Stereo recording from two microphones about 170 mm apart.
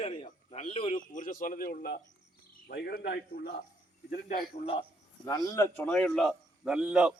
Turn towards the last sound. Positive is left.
turn(degrees=-5)  # may be behind; listen again after turning